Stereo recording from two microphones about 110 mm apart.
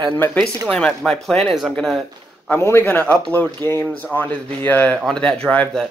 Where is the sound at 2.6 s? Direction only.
20° left (ahead or behind).